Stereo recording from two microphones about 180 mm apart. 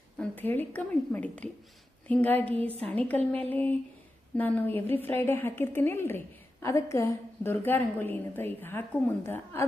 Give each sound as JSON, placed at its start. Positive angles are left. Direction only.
{"t": 0.2, "sound": "a woman's voice", "side_deg": 10}